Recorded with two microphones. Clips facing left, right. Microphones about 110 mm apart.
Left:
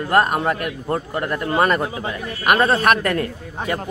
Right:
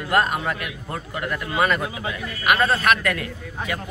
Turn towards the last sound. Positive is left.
turn(degrees=40)  # may be behind; listen again after turning